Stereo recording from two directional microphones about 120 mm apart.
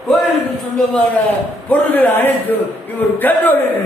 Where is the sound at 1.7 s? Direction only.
15° left (ahead or behind).